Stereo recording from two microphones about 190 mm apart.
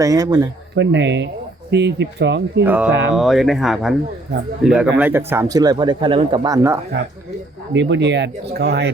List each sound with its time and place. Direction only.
0.0 s speech: 20° right (ahead or behind)
0.8 s speech: 65° right (ahead or behind)
2.6 s speech: 10° right (ahead or behind)
2.9 s speech: 75° right (ahead or behind)
3.2 s speech: centre (ahead or behind); by 6.7 s 15° right (ahead or behind)
6.9 s speech: 65° right (ahead or behind)